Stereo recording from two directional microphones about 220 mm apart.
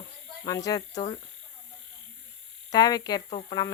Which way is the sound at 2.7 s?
15° left (ahead or behind).